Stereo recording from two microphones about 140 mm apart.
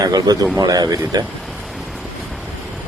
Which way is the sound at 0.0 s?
30° right (ahead or behind).